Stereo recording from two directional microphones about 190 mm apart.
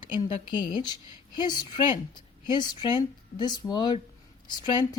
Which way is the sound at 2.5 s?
25° left (ahead or behind).